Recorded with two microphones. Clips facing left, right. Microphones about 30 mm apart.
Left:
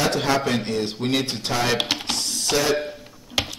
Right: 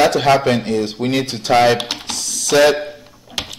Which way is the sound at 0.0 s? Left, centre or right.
Right.